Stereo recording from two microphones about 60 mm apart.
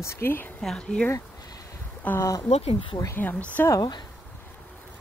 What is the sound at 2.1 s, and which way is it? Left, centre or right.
Speech, left.